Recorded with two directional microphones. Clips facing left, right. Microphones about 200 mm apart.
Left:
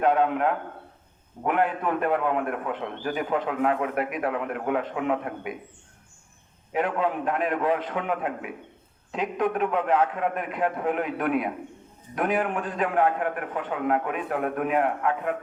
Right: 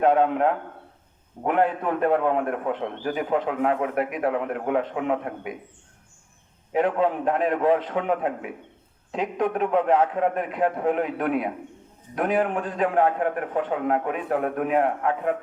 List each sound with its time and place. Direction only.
0.0 s a man's voice: 25° right (ahead or behind)
6.7 s a man's voice: 30° right (ahead or behind)